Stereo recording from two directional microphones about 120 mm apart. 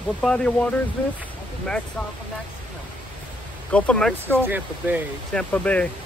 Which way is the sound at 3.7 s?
10° left (ahead or behind).